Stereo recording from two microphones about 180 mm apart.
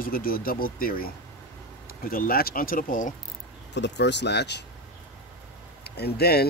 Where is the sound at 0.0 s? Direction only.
55° left (ahead or behind).